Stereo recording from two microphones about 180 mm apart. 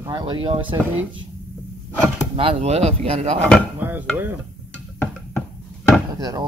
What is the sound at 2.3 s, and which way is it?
Speech, 35° right (ahead or behind).